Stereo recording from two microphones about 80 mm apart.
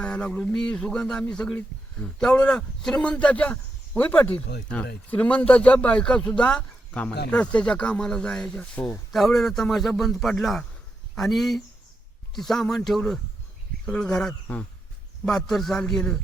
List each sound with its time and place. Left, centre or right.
0.0 s a man's voice: centre
9.1 s a man's voice: centre